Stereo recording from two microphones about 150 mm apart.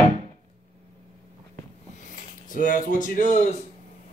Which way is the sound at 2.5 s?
65° left (ahead or behind).